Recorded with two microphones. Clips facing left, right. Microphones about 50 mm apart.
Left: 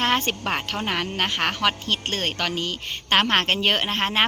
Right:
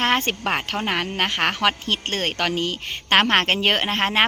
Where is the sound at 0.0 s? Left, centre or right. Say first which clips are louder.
Right 2 dB; right.